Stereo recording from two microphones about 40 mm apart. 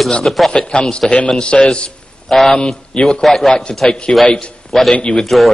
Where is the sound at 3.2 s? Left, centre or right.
Centre.